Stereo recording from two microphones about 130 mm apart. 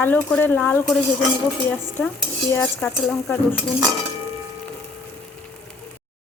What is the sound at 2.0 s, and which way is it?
Stir, 15° left (ahead or behind).